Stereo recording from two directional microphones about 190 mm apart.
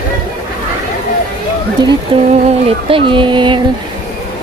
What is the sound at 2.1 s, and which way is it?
Speech, 30° right (ahead or behind).